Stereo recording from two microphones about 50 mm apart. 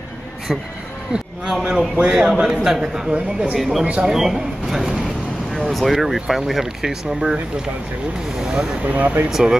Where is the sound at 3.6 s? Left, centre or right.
Centre.